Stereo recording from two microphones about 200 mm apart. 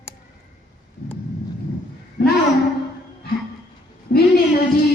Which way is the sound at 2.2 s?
55° left (ahead or behind).